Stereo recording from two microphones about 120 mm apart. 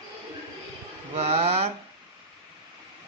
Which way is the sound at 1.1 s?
60° right (ahead or behind).